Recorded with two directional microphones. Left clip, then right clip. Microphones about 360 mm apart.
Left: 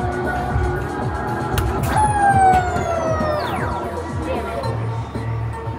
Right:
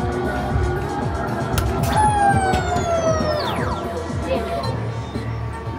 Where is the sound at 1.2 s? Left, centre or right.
Centre.